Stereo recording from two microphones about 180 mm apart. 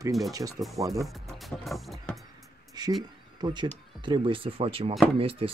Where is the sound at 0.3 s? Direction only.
20° right (ahead or behind).